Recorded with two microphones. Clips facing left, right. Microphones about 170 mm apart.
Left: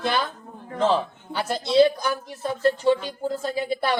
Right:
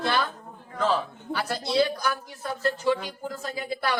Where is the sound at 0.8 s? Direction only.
25° left (ahead or behind).